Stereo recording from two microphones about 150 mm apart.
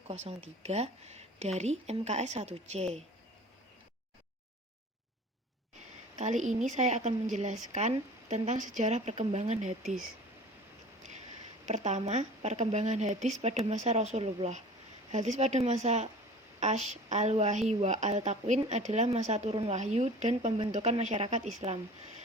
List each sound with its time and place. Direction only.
0.1 s a woman's voice: 45° right (ahead or behind)
6.1 s a woman's voice: 50° right (ahead or behind)
11.6 s a woman's voice: 50° right (ahead or behind)